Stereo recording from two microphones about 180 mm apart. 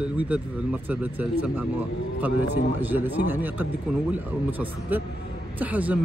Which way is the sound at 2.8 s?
10° right (ahead or behind).